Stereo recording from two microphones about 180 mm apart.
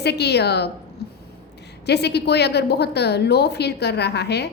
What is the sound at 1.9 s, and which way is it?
A woman's voice, 65° left (ahead or behind).